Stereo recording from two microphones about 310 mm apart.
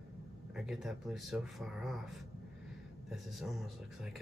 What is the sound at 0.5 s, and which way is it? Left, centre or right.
Speech, centre.